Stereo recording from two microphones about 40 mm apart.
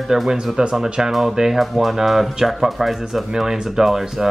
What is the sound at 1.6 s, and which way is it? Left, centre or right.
Speech, centre.